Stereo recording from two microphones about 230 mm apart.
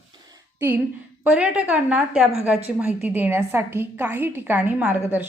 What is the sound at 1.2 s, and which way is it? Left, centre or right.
A woman's voice, centre.